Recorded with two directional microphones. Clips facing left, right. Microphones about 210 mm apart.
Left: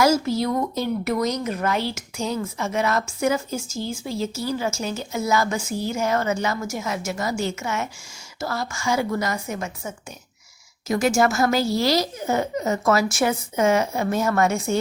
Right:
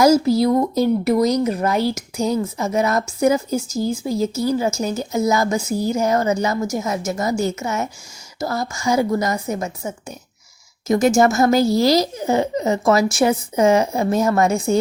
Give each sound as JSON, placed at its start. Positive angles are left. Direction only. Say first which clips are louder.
{"t": 0.0, "sound": "speech", "louder": "right 6 dB", "side_deg": -35}
{"t": 4.4, "sound": "speech", "louder": "right 6 dB", "side_deg": -20}
{"t": 4.7, "sound": "speech", "louder": "right 6 dB", "side_deg": -40}
{"t": 11.3, "sound": "speech", "louder": "right 5 dB", "side_deg": -20}
{"t": 11.8, "sound": "speech", "louder": "right 5 dB", "side_deg": -40}